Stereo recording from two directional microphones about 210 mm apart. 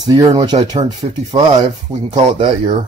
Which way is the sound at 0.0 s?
20° right (ahead or behind).